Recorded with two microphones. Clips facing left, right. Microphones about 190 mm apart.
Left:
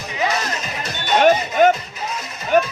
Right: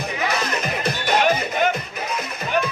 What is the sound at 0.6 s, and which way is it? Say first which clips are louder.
Music: right 4 dB; 55° right (ahead or behind).